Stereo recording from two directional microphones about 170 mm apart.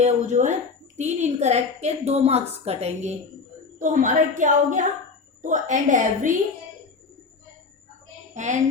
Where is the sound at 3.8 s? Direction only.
50° right (ahead or behind).